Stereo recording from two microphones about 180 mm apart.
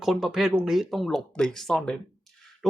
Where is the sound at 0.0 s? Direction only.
Centre (ahead or behind).